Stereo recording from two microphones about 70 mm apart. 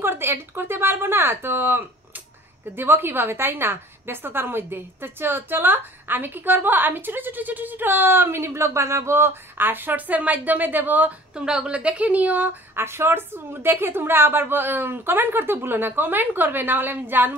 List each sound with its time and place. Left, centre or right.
0.0 s a woman's voice: right
11.3 s a woman's voice: centre
12.7 s a woman's voice: right